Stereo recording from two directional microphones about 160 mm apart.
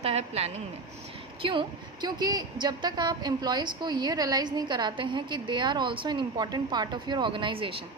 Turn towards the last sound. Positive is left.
turn(degrees=-35)  # may be behind; listen again after turning